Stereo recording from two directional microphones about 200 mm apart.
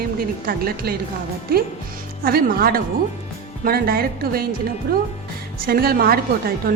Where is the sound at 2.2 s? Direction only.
50° right (ahead or behind).